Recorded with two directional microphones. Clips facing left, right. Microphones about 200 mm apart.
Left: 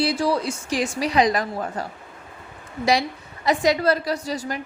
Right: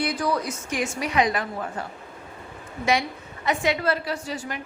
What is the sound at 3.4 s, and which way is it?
A woman's voice, 35° left (ahead or behind).